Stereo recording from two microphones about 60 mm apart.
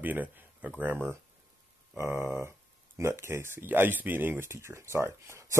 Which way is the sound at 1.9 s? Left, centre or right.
Right.